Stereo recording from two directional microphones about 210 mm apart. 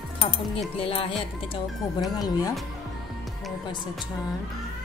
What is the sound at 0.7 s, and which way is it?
A woman's voice, 25° left (ahead or behind).